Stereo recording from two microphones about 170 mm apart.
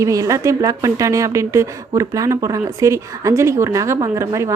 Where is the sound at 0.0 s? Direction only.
20° right (ahead or behind).